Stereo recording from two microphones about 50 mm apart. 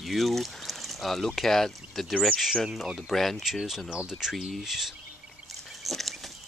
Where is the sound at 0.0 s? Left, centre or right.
Centre.